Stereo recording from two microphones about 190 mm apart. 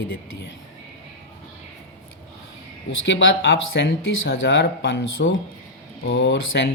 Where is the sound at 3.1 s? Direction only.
75° left (ahead or behind).